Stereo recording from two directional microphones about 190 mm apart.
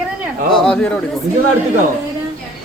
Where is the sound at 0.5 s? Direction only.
5° left (ahead or behind).